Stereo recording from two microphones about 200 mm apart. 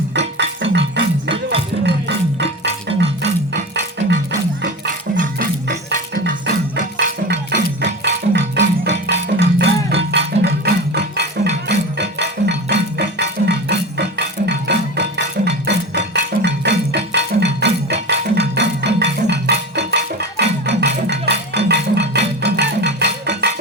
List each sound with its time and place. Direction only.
0.1 s music: 60° right (ahead or behind)
5.1 s music: 40° right (ahead or behind)
6.2 s music: 60° right (ahead or behind)